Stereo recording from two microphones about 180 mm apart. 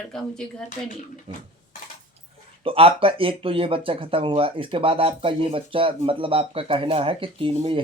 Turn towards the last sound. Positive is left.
turn(degrees=-30)  # may be behind; listen again after turning